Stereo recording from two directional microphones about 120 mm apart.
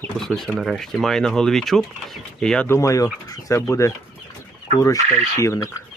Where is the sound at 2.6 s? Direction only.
25° left (ahead or behind).